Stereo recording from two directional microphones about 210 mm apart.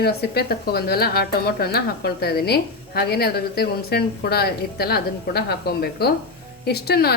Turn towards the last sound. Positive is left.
turn(degrees=50)  # may be behind; listen again after turning